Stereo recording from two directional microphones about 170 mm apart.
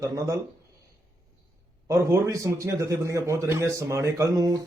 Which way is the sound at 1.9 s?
15° right (ahead or behind).